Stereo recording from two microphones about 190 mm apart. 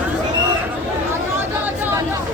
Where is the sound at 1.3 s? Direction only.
10° right (ahead or behind).